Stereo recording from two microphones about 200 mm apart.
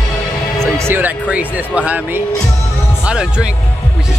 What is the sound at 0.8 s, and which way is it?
Music, 10° right (ahead or behind).